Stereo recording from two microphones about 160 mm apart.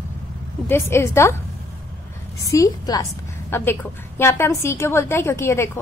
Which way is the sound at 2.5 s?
20° left (ahead or behind).